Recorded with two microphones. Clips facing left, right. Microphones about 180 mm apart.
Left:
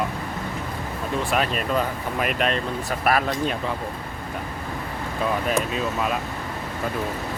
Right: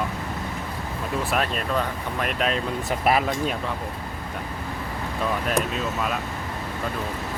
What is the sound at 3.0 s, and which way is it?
Speech, 15° right (ahead or behind).